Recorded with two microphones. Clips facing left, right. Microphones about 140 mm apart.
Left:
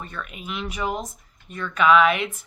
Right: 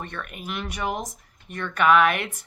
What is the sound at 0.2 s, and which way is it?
Speech, 55° right (ahead or behind).